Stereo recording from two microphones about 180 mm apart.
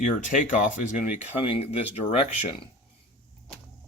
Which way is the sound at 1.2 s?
35° left (ahead or behind).